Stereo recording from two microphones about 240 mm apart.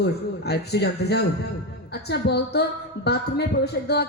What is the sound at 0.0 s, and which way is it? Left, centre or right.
A man's voice, left.